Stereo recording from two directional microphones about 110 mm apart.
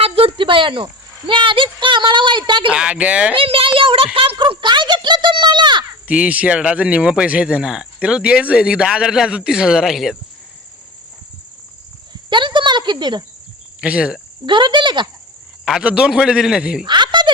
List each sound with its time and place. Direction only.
0.0 s cricket: 60° right (ahead or behind)
1.3 s speech: 50° right (ahead or behind)
2.6 s speech: 10° right (ahead or behind)
3.3 s a woman's voice: 55° right (ahead or behind)
6.1 s speech: 10° right (ahead or behind)
12.3 s cricket: 45° right (ahead or behind)
13.8 s speech: 10° right (ahead or behind)
14.4 s speech: 45° right (ahead or behind)
15.6 s speech: 5° right (ahead or behind)
16.8 s chuckle: 45° right (ahead or behind)